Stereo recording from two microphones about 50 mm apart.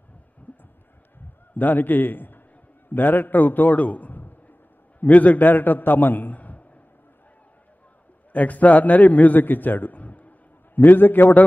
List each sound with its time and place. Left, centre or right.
0.5 s a sound: left
1.5 s a man's voice: left
8.3 s a man's voice: left
10.8 s a man's voice: left